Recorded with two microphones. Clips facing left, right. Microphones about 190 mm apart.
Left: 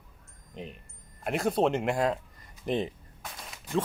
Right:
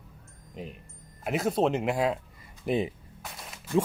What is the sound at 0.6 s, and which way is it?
Speech, 5° right (ahead or behind).